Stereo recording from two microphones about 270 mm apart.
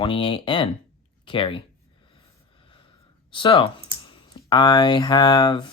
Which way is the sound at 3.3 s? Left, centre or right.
Centre.